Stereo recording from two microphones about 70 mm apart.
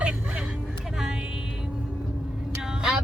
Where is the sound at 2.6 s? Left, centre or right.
Centre.